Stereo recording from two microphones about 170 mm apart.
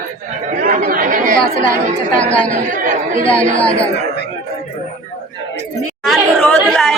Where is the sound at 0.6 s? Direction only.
55° right (ahead or behind).